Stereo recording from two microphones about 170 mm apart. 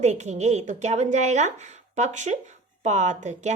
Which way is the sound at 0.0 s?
40° right (ahead or behind).